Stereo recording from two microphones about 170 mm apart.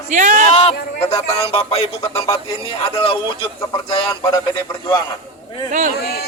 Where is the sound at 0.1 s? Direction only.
45° right (ahead or behind).